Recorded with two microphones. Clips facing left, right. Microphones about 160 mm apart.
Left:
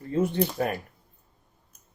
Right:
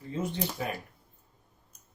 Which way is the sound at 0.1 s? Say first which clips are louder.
Left 8 dB; 60° left (ahead or behind).